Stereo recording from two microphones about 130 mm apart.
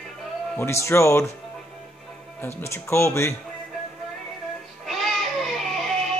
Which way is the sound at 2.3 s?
20° left (ahead or behind).